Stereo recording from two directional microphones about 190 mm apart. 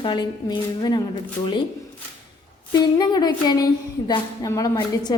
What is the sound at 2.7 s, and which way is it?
Speech, 20° left (ahead or behind).